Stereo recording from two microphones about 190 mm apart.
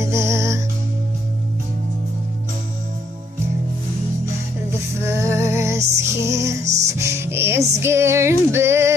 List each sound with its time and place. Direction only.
0.0 s music: 15° right (ahead or behind)
5.0 s music: 15° right (ahead or behind)
6.6 s music: 35° right (ahead or behind)
7.0 s music: 15° right (ahead or behind)